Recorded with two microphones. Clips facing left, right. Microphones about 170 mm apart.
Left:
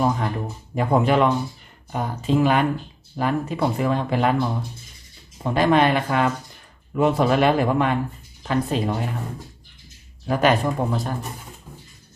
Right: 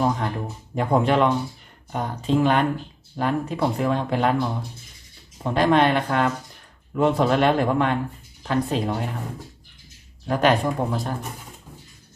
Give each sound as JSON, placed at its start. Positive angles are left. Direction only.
{"t": 0.0, "sound": "speech", "side_deg": 0}
{"t": 10.2, "sound": "speech", "side_deg": 0}